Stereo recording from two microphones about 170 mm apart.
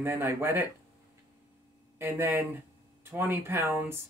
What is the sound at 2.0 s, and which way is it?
Speech, 10° right (ahead or behind).